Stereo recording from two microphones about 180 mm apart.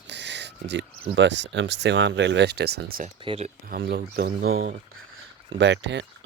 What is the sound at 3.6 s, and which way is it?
Speech, 60° right (ahead or behind).